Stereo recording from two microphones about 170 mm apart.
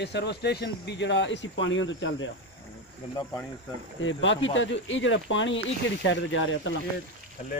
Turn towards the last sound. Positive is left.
turn(degrees=90)